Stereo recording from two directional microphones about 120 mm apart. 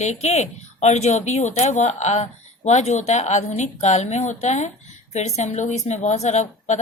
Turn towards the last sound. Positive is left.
turn(degrees=70)  # may be behind; listen again after turning